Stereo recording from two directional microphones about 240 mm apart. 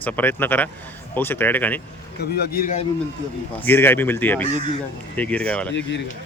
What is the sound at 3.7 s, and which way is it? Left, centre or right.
Speech, centre.